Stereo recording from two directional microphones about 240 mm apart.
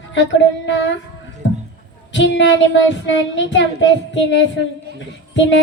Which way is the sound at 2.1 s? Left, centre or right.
Left.